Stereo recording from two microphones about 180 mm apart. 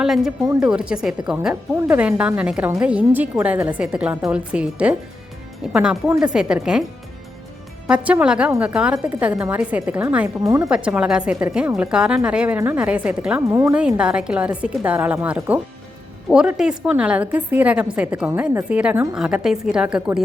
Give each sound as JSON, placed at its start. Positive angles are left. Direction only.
{"t": 0.0, "sound": "a woman's voice", "side_deg": 0}
{"t": 7.9, "sound": "speech", "side_deg": -5}
{"t": 10.4, "sound": "speech", "side_deg": -20}
{"t": 10.7, "sound": "speech", "side_deg": -5}
{"t": 13.7, "sound": "a woman's voice", "side_deg": -5}